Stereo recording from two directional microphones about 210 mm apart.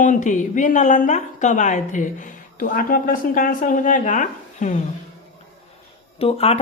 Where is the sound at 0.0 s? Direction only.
35° left (ahead or behind).